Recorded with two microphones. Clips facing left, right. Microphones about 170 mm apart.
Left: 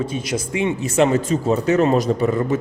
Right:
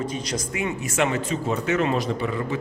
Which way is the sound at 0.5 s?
30° left (ahead or behind).